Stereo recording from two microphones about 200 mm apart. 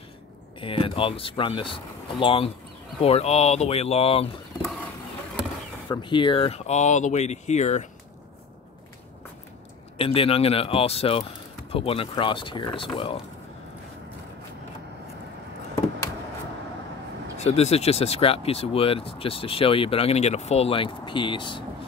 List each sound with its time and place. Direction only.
0.6 s speech: 25° left (ahead or behind)
5.9 s speech: 25° left (ahead or behind)
9.9 s speech: 30° left (ahead or behind)
17.4 s speech: 30° left (ahead or behind)